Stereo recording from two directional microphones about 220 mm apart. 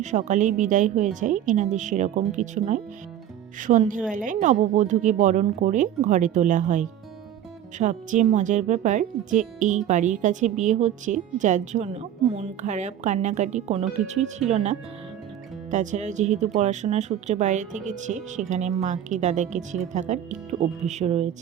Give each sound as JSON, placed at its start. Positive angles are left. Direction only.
{"t": 0.0, "sound": "speech", "side_deg": -35}